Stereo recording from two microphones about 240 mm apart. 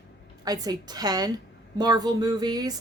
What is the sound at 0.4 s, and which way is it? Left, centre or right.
Speech, centre.